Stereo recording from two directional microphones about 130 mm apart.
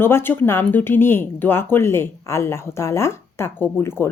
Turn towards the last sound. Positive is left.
turn(degrees=20)  # may be behind; listen again after turning